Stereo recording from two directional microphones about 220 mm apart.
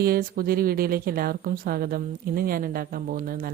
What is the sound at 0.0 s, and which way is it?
Speech, 40° right (ahead or behind).